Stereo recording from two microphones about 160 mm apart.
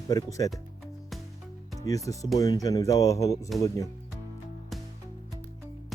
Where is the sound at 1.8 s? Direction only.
20° left (ahead or behind).